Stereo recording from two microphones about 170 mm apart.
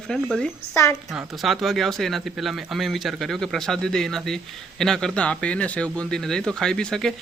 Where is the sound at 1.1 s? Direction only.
Centre (ahead or behind).